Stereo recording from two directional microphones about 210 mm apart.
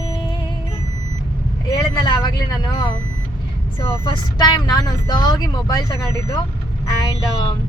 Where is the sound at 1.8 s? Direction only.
20° left (ahead or behind).